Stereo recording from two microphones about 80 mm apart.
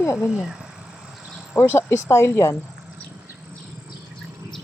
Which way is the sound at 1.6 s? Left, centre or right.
Left.